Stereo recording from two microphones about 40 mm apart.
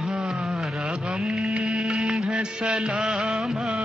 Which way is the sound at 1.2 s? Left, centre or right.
Centre.